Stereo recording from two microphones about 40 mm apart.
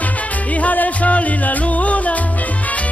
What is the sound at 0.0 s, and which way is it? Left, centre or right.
Music, left.